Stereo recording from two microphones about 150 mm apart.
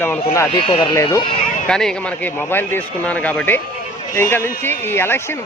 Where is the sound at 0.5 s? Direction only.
35° left (ahead or behind).